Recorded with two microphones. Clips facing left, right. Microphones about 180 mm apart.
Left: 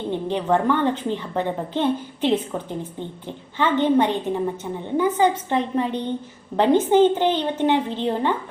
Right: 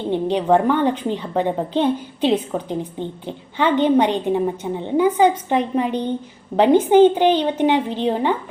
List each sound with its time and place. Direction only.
0.1 s a woman's voice: 15° right (ahead or behind)